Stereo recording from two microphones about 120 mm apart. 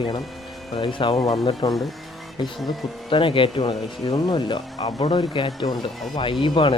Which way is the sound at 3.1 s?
45° left (ahead or behind).